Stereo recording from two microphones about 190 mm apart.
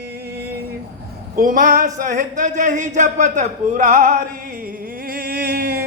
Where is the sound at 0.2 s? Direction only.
60° right (ahead or behind).